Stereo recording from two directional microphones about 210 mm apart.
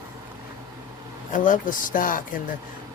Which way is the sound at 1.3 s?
40° left (ahead or behind).